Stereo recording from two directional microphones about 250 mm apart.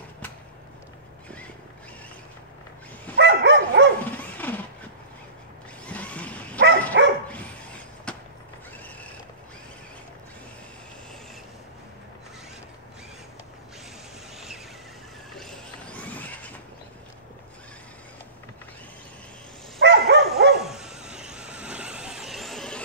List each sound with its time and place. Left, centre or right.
3.2 s dog: right
4.0 s dog: centre
5.9 s a sound: centre
7.0 s dog: right
7.3 s vehicle: centre
15.3 s vehicle: centre
19.8 s dog: right
20.6 s vehicle: centre